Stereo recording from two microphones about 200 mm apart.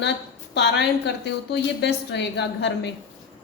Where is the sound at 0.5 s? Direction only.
60° left (ahead or behind).